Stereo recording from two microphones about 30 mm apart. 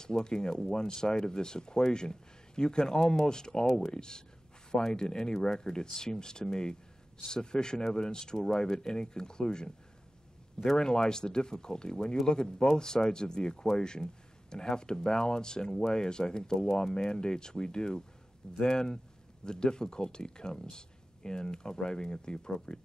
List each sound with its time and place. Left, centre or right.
0.0 s speech: left
10.8 s speech: left